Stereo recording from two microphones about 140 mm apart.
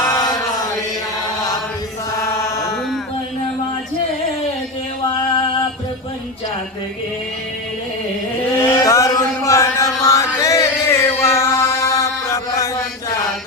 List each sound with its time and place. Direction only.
0.1 s chant: 30° left (ahead or behind)
8.5 s a sound: 20° left (ahead or behind)
10.0 s music: 25° left (ahead or behind)